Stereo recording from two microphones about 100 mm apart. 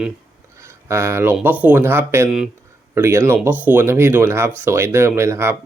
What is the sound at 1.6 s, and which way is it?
Speech, 20° right (ahead or behind).